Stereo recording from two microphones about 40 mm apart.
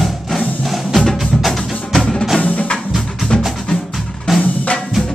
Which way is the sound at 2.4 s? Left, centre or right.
Left.